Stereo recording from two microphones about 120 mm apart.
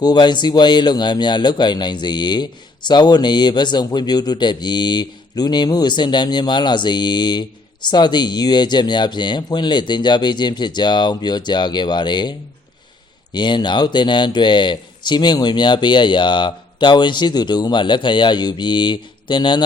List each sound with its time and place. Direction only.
0.0 s a man's voice: 35° left (ahead or behind)
13.3 s a man's voice: 40° left (ahead or behind)